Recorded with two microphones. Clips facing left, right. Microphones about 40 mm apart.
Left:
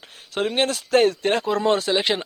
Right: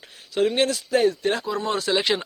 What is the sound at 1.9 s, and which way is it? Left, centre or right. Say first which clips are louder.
Speech: left 1 dB; centre.